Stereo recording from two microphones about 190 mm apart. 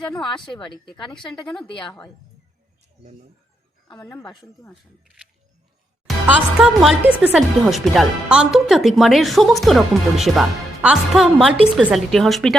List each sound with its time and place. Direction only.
0.0 s a woman's voice: 5° left (ahead or behind)
0.5 s a woman's voice: 25° left (ahead or behind)
3.0 s speech: 40° right (ahead or behind)
4.1 s a woman's voice: 20° left (ahead or behind)
4.7 s a woman's voice: centre (ahead or behind)
6.2 s a woman's voice: 5° right (ahead or behind)